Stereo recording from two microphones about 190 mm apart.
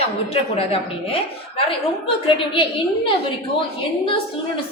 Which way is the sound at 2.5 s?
30° left (ahead or behind).